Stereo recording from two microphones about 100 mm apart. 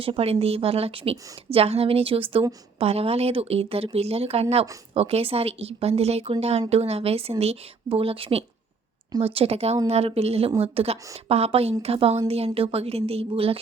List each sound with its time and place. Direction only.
0.0 s a woman's voice: 75° right (ahead or behind)
2.7 s speech: 80° right
3.9 s speech: 90° right; by 13.6 s 70° right (ahead or behind)